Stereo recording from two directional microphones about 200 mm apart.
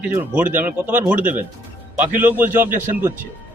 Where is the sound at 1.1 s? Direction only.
40° right (ahead or behind).